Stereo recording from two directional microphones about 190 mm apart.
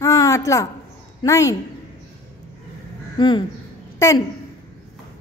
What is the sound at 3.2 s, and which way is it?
Speech, 25° left (ahead or behind).